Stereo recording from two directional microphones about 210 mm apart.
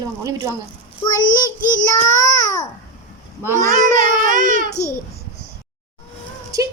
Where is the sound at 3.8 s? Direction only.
40° right (ahead or behind).